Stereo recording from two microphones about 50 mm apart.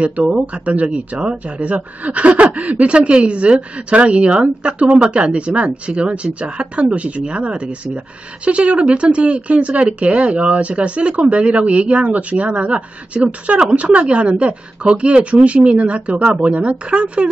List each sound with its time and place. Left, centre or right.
0.0 s speech: right